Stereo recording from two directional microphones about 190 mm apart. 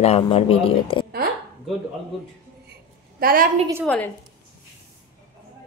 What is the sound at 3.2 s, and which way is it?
Speech, 50° right (ahead or behind).